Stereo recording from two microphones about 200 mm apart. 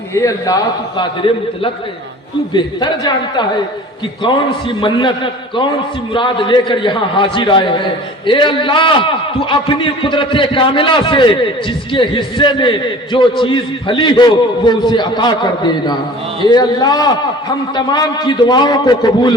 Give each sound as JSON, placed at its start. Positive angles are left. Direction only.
{"t": 0.1, "sound": "a man's voice", "side_deg": 15}